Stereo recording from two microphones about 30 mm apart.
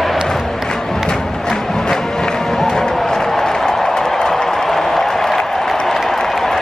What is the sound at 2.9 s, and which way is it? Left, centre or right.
Applause, centre.